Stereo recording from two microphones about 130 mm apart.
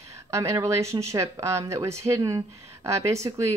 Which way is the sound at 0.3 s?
20° right (ahead or behind).